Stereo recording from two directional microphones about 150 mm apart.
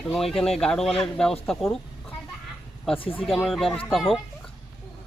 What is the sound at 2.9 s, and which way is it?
Speech, 35° left (ahead or behind).